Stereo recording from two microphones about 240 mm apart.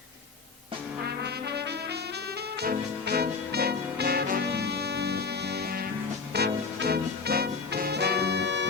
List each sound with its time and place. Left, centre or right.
1.0 s music: right